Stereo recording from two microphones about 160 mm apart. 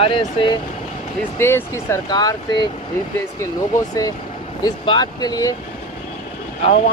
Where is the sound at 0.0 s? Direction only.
35° left (ahead or behind).